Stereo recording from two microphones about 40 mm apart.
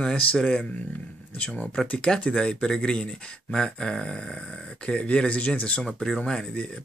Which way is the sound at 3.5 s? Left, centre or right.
Centre.